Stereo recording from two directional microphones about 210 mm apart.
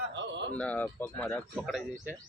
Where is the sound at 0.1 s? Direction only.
60° right (ahead or behind).